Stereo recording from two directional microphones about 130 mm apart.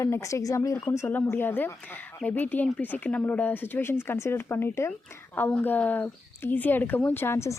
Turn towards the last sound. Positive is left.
turn(degrees=20)  # may be behind; listen again after turning